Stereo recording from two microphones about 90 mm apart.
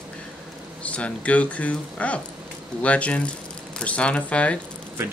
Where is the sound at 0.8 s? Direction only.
15° left (ahead or behind).